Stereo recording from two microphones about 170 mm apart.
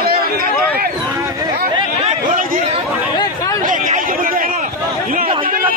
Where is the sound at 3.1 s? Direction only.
25° left (ahead or behind).